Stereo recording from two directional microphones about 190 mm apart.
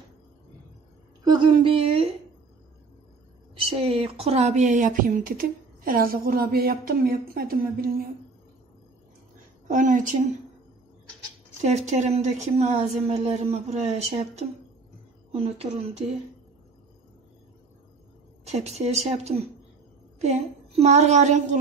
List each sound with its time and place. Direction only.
1.2 s a woman's voice: 25° right (ahead or behind)
3.6 s speech: 30° right (ahead or behind); by 8.1 s 50° right (ahead or behind)
9.7 s speech: 45° right (ahead or behind)
11.6 s a woman's voice: 35° right (ahead or behind)
18.4 s a woman's voice: 35° right (ahead or behind)